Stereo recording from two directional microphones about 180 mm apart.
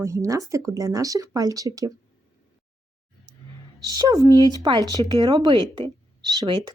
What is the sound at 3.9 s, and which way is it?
Speech, 20° right (ahead or behind).